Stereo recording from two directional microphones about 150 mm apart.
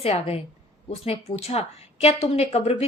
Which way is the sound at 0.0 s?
40° left (ahead or behind).